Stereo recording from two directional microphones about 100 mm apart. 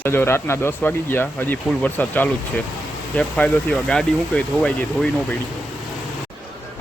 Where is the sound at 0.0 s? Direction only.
20° left (ahead or behind).